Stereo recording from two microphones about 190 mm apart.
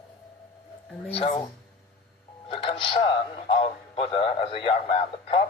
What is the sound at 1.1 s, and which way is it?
Speech, 30° left (ahead or behind).